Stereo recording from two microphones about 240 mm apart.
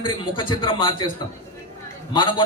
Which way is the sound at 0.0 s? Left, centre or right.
Centre.